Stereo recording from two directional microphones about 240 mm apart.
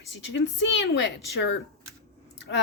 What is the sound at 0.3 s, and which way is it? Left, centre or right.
A woman's voice, left.